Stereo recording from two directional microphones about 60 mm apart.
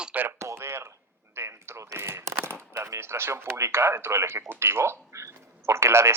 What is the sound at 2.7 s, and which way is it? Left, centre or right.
Speech, right.